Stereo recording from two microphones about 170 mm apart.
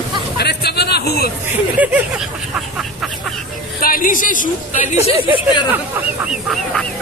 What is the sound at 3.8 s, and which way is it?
A woman's voice, 55° left (ahead or behind).